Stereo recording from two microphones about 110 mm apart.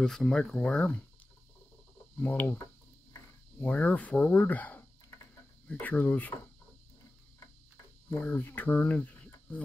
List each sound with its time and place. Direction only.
0.0 s speech: 5° left (ahead or behind)
2.1 s speech: 15° left (ahead or behind)
8.1 s speech: 15° left (ahead or behind)